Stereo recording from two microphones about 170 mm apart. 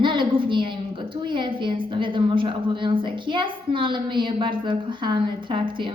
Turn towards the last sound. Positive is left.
turn(degrees=-30)  # may be behind; listen again after turning